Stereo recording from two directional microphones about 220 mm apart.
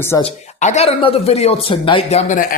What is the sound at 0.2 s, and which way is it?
Speech, 30° left (ahead or behind).